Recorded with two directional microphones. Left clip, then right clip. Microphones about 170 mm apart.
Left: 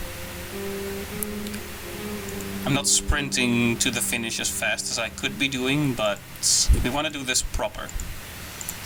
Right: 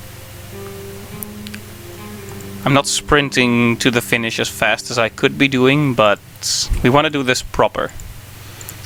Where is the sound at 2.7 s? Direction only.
5° left (ahead or behind).